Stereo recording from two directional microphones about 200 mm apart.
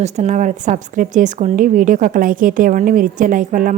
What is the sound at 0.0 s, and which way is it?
A woman's voice, 35° right (ahead or behind).